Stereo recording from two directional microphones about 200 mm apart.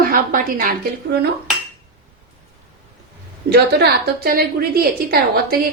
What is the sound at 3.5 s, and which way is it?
A woman's voice, 50° right (ahead or behind).